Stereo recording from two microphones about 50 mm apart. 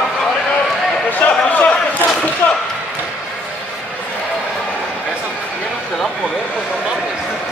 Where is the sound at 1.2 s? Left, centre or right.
Left.